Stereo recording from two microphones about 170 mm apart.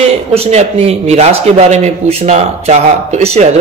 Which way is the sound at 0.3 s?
35° right (ahead or behind).